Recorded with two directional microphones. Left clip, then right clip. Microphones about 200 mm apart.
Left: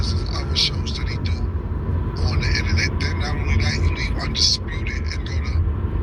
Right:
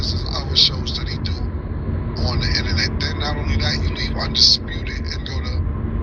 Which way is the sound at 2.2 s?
40° right (ahead or behind).